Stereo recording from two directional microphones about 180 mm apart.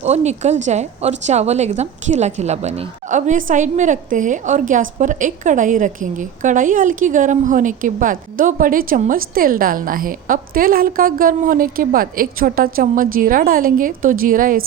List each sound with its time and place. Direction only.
0.0 s a woman's voice: 40° right (ahead or behind)